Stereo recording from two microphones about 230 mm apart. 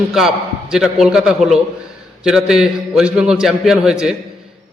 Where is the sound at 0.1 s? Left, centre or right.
Centre.